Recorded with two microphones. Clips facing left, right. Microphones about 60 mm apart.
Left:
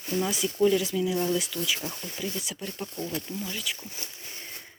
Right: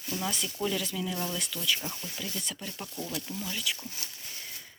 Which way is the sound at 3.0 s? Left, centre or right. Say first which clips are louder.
Left 3 dB; left.